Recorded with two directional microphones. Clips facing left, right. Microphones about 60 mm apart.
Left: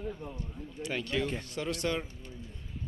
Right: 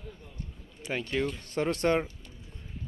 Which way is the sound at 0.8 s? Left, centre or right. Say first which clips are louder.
Right 2 dB; right.